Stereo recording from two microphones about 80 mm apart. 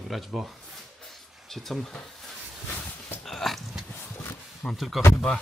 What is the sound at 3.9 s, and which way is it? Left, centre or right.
Horse, left.